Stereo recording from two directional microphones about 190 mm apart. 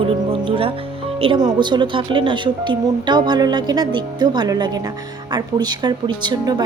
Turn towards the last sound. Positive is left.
turn(degrees=-20)  # may be behind; listen again after turning